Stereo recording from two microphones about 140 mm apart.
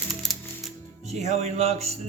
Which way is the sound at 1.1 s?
50° right (ahead or behind).